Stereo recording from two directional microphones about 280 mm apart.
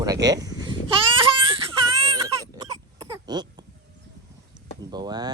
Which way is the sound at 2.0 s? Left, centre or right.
Centre.